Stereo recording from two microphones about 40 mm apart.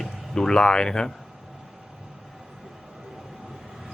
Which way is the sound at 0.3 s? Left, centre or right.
Centre.